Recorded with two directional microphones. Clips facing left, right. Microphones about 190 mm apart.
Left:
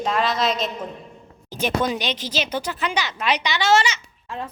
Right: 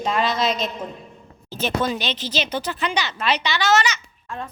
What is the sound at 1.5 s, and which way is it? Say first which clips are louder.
Speech: left 1 dB; 15° left (ahead or behind).